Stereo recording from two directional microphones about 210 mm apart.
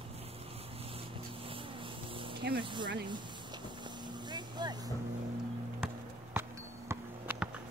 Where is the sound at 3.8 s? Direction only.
20° right (ahead or behind).